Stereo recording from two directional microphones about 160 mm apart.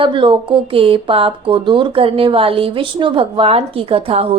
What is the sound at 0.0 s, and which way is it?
Speech, 30° right (ahead or behind).